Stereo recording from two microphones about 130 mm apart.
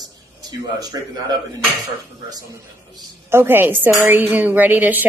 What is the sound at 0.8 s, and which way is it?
Speech, 30° right (ahead or behind).